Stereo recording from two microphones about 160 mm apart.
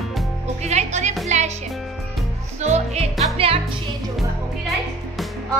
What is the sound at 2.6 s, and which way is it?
Music, 45° right (ahead or behind).